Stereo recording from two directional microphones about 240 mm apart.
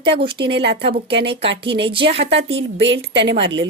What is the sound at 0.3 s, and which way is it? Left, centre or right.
Speech, right.